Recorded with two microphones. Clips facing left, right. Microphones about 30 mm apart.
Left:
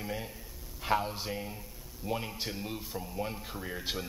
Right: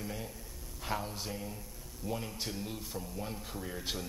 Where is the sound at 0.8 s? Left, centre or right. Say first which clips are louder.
Left 6 dB; left.